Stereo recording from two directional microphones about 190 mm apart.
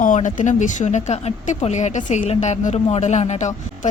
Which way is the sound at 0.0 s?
40° left (ahead or behind).